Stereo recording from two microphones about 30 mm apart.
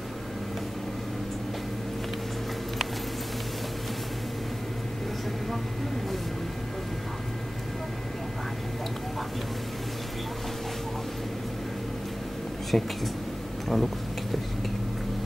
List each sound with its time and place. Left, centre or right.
12.7 s speech: left
13.7 s speech: centre